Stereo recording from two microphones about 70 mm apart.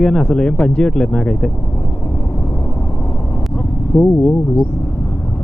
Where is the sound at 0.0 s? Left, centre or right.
Centre.